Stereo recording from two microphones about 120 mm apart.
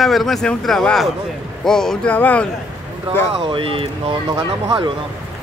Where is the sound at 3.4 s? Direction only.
45° right (ahead or behind).